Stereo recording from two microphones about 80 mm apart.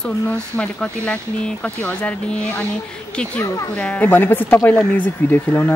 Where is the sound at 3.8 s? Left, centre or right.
Centre.